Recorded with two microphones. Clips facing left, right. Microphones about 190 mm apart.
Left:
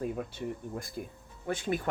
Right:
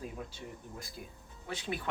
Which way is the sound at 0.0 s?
55° left (ahead or behind).